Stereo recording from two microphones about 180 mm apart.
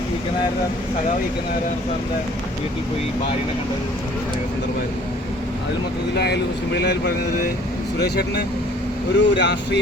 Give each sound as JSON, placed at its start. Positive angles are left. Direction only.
{"t": 6.1, "sound": "speech", "side_deg": 65}